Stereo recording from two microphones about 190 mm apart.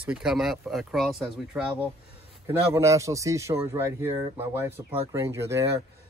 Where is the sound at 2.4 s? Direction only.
15° right (ahead or behind).